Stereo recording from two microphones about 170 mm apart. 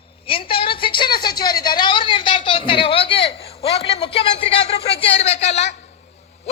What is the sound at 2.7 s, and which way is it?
A man's voice, 30° left (ahead or behind).